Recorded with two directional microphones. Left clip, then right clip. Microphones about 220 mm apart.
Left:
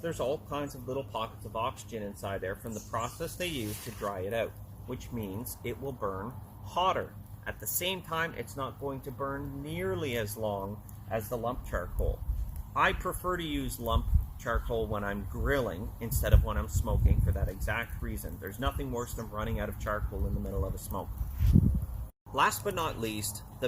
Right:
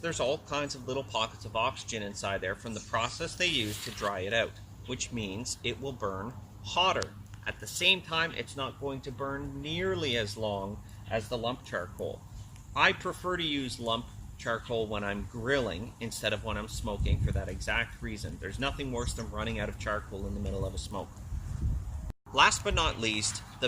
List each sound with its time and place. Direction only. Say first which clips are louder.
0.0 s speech: right 2 dB; 15° right (ahead or behind)
22.4 s speech: right 4 dB; 10° right (ahead or behind)